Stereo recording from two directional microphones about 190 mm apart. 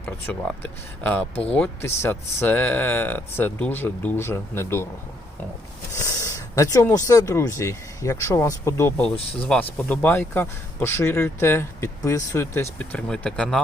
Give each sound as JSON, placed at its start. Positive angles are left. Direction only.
{"t": 0.0, "sound": "speech", "side_deg": 10}
{"t": 6.0, "sound": "speech", "side_deg": 15}
{"t": 9.0, "sound": "speech", "side_deg": 30}
{"t": 9.4, "sound": "speech", "side_deg": 5}